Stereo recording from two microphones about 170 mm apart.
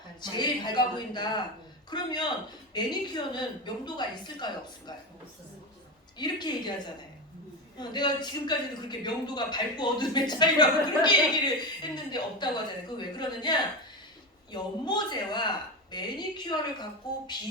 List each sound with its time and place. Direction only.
0.2 s speech: 25° left (ahead or behind)
6.1 s speech: 25° left (ahead or behind)
7.8 s speech: 25° left (ahead or behind)